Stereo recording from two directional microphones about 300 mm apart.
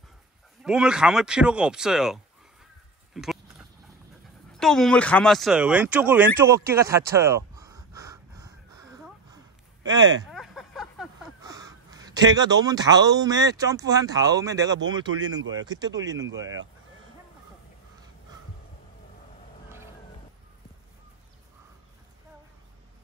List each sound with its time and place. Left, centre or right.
0.7 s speech: centre
3.2 s biting: centre
4.6 s a sound: centre
9.8 s speech: centre
10.3 s a sound: centre
11.4 s speech: centre